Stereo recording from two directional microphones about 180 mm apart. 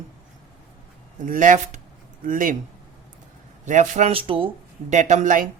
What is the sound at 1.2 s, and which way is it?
A man's voice, 45° right (ahead or behind).